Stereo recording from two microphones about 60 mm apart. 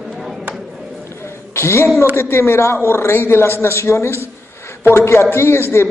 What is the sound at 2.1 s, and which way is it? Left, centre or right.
A man's voice, left.